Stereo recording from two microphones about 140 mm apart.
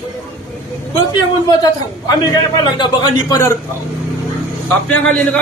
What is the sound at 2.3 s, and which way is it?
A man's voice, 30° left (ahead or behind).